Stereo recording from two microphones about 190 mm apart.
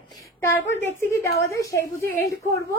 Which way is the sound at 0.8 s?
15° left (ahead or behind).